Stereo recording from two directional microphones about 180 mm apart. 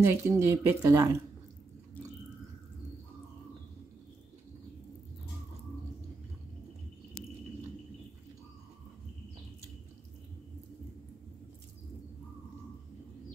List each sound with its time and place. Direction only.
0.0 s speech: 15° right (ahead or behind)